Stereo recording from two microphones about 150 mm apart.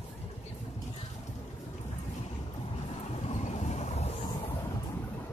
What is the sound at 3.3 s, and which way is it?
Vehicle, 50° left (ahead or behind).